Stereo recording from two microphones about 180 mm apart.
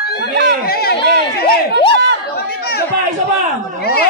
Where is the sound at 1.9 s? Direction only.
75° right (ahead or behind).